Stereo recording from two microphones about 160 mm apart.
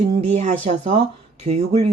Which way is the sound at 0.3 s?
45° right (ahead or behind).